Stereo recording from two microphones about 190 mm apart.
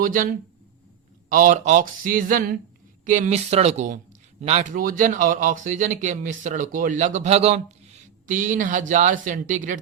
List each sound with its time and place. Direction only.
0.0 s speech: 45° right (ahead or behind)
1.3 s speech: 45° right (ahead or behind)